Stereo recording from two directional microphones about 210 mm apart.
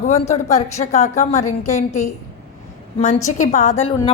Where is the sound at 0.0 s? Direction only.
30° left (ahead or behind).